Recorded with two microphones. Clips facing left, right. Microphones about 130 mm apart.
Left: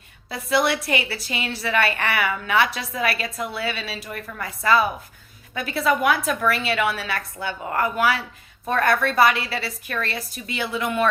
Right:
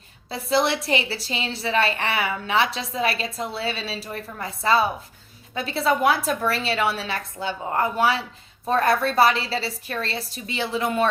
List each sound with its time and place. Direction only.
0.3 s a woman's voice: 30° right (ahead or behind)